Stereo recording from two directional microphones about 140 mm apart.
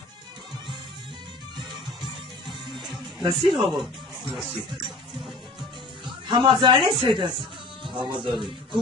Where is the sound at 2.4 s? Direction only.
Centre (ahead or behind).